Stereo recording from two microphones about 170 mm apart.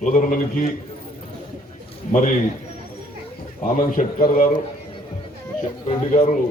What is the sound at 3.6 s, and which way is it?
A man's voice, 55° left (ahead or behind).